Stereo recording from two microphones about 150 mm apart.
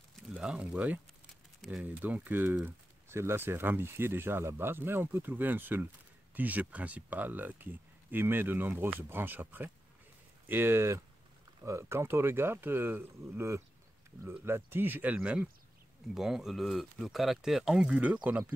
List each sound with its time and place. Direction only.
0.4 s speech: 5° right (ahead or behind)